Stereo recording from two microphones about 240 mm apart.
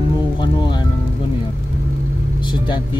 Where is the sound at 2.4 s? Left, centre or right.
Centre.